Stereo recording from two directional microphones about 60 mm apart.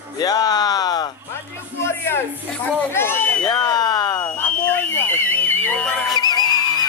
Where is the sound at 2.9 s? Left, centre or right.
Left.